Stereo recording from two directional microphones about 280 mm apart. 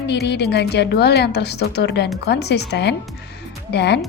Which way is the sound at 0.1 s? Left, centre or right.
Left.